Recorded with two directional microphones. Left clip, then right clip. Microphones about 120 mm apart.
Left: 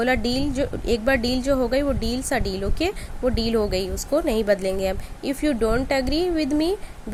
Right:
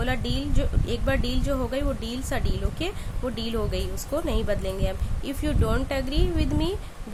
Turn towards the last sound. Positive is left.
turn(degrees=35)  # may be behind; listen again after turning